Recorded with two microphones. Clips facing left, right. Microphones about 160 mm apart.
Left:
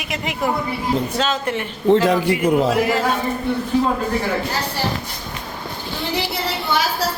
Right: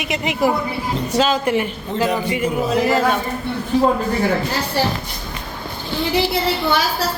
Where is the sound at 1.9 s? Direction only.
85° left.